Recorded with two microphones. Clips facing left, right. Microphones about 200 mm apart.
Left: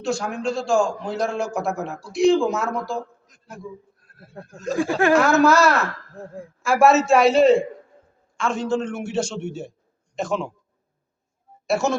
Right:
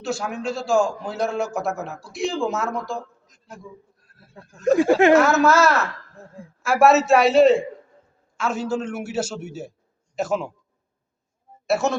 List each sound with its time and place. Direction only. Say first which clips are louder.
0.0 s a man's voice: left 2 dB; 5° right (ahead or behind)
4.4 s speech: left 6 dB; 60° left (ahead or behind)
4.8 s speech: right 3 dB; 20° right (ahead or behind)
5.1 s a man's voice: even; centre (ahead or behind)
11.6 s speech: even; centre (ahead or behind)